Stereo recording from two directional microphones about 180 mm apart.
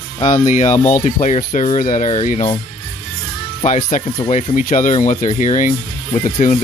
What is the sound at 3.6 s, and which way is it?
Speech, 45° left (ahead or behind).